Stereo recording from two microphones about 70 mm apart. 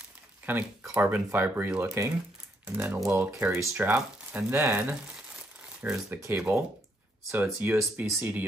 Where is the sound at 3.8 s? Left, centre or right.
Right.